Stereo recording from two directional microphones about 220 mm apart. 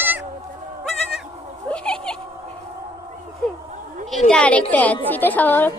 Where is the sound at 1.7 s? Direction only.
5° left (ahead or behind).